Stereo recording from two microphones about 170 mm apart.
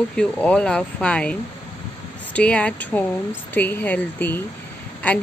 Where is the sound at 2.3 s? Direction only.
5° left (ahead or behind).